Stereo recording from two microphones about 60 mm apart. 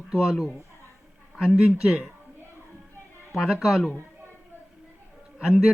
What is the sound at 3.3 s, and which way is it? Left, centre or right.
Speech, centre.